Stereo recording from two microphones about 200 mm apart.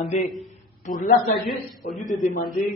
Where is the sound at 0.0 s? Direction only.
35° left (ahead or behind).